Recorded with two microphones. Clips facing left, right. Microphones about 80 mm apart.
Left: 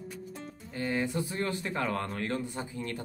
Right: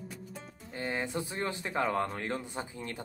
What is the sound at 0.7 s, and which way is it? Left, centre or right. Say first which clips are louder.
Speech: left 3 dB; right.